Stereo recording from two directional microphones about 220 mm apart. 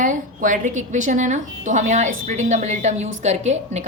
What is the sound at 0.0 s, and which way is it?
A woman's voice, 35° right (ahead or behind).